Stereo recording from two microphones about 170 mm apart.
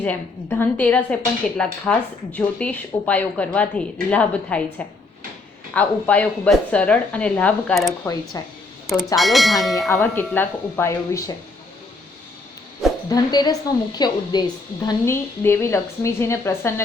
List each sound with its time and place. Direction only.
0.0 s a woman's voice: 10° left (ahead or behind)
8.3 s speech: 20° left (ahead or behind)
9.1 s speech: centre (ahead or behind)
9.9 s a woman's voice: 10° left (ahead or behind)
13.1 s a woman's voice: 25° left (ahead or behind)